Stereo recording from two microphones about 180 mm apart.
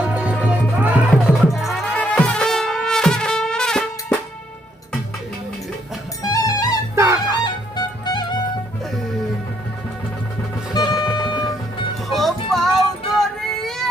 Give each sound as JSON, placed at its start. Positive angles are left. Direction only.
{"t": 0.1, "sound": "music", "side_deg": -5}
{"t": 6.2, "sound": "music", "side_deg": 20}
{"t": 6.9, "sound": "music", "side_deg": -15}
{"t": 7.3, "sound": "music", "side_deg": 25}
{"t": 10.8, "sound": "music", "side_deg": 20}
{"t": 12.0, "sound": "music", "side_deg": 0}